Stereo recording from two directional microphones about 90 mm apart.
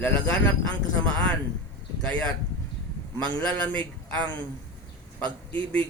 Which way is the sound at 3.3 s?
15° left (ahead or behind).